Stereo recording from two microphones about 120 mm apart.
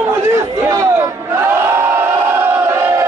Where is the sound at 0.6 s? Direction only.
25° right (ahead or behind).